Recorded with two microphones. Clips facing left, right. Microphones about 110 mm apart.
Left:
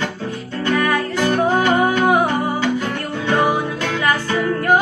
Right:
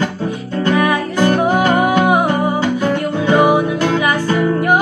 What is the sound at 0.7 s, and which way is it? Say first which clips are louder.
Music: right 2 dB; 15° right (ahead or behind).